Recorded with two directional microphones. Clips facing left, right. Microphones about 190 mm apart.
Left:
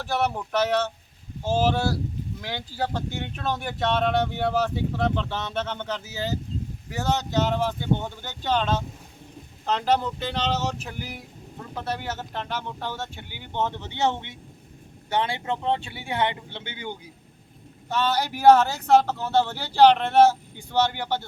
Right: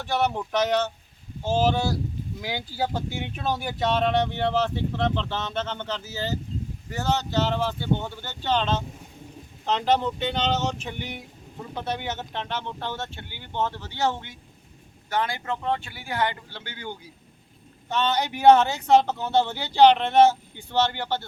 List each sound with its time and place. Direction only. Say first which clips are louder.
0.0 s speech: right 1 dB; 5° left (ahead or behind)
17.8 s speech: even; 5° left (ahead or behind)